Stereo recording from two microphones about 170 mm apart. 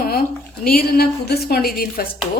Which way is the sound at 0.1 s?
60° left (ahead or behind).